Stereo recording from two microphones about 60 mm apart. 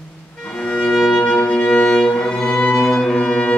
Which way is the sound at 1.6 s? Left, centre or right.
Centre.